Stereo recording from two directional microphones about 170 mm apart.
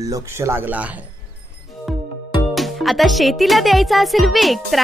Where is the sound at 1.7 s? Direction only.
Centre (ahead or behind).